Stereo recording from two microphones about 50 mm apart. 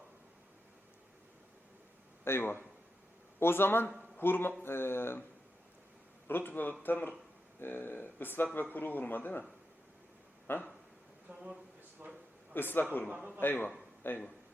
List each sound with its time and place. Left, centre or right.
2.2 s speech: left
6.2 s a man's voice: left
10.5 s speech: left
11.3 s a man's voice: right
12.5 s speech: left